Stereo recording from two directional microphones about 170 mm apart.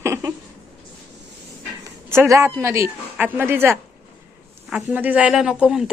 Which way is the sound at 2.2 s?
15° right (ahead or behind).